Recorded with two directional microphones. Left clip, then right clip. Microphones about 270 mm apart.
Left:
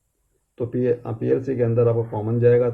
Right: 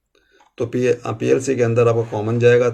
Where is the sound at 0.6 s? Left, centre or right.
Centre.